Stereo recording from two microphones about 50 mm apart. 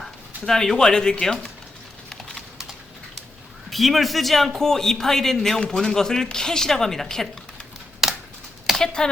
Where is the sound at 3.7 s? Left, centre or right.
Centre.